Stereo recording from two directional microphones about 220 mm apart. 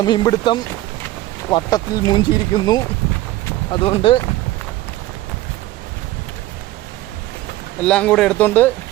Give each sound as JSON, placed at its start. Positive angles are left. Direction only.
{"t": 0.0, "sound": "speech", "side_deg": 20}
{"t": 7.8, "sound": "speech", "side_deg": 5}